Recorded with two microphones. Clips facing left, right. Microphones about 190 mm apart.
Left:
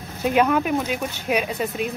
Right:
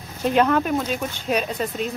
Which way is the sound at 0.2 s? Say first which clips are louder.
Even; 10° left (ahead or behind).